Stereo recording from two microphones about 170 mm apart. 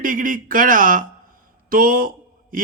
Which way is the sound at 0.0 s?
55° right (ahead or behind).